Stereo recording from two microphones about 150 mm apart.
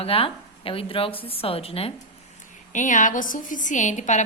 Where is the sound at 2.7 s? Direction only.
55° left (ahead or behind).